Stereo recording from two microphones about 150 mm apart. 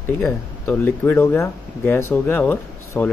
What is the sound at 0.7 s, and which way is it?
Speech, 10° left (ahead or behind).